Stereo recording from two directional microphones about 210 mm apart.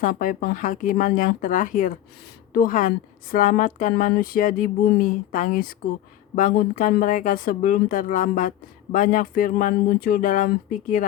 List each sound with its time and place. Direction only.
0.0 s speech: 40° left (ahead or behind)